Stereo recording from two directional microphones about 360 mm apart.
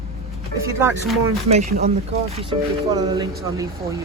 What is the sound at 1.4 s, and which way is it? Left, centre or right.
Speech, centre.